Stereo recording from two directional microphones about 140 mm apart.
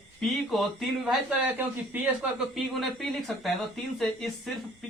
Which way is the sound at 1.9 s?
15° right (ahead or behind).